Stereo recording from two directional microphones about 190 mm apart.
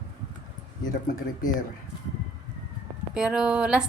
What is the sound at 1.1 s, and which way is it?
Speech, 45° left (ahead or behind).